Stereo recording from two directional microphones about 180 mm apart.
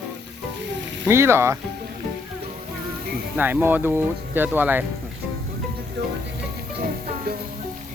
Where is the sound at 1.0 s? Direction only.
15° right (ahead or behind).